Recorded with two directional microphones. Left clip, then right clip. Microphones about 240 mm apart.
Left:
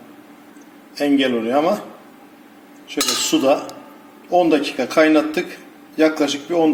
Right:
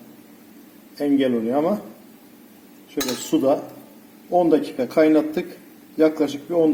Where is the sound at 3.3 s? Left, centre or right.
Centre.